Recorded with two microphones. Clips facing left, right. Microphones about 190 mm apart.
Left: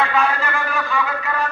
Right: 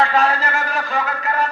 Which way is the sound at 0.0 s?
35° right (ahead or behind).